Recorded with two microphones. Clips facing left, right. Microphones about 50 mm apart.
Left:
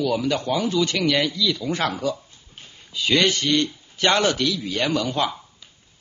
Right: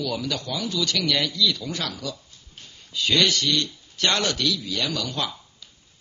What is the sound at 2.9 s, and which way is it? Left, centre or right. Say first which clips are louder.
Speech: left 2 dB; centre.